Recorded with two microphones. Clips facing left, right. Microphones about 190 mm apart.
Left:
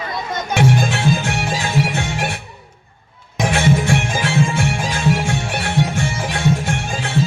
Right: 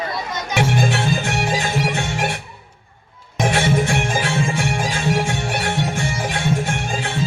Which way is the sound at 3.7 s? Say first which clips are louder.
Left 1 dB; 50° right (ahead or behind).